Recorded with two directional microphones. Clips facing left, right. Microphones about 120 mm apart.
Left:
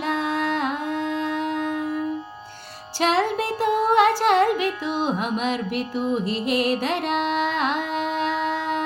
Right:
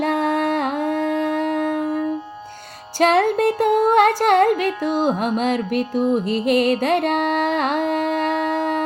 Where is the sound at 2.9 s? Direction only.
50° right (ahead or behind).